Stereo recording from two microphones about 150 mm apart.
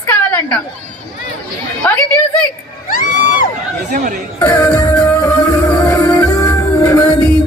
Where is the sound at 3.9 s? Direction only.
60° right (ahead or behind).